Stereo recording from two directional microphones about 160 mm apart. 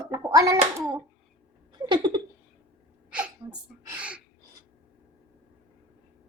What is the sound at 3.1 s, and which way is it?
Sneeze, 5° right (ahead or behind).